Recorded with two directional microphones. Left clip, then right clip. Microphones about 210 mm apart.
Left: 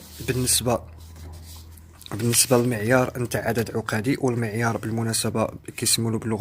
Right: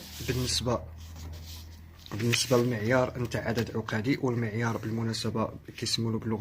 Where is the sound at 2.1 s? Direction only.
40° left (ahead or behind).